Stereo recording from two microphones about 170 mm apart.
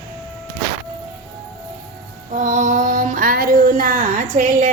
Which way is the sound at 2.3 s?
50° right (ahead or behind).